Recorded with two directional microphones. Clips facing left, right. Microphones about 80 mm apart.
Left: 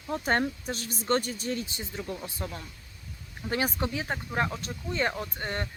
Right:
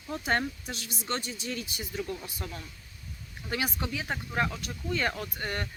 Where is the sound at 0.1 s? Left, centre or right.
Left.